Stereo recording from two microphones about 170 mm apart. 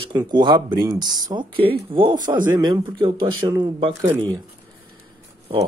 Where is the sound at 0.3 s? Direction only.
25° right (ahead or behind).